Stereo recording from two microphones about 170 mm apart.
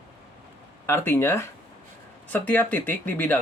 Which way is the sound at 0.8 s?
15° left (ahead or behind).